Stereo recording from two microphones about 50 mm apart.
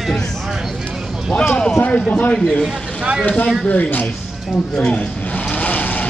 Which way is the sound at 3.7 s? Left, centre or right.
Left.